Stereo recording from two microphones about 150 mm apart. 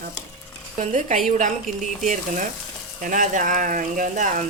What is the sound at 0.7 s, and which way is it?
Speech, 60° right (ahead or behind).